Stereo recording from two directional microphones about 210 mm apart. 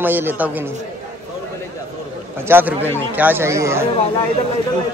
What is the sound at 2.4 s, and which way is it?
A man's voice, 10° right (ahead or behind).